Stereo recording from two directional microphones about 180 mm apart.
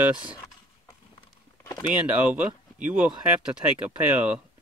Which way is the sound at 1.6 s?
20° left (ahead or behind).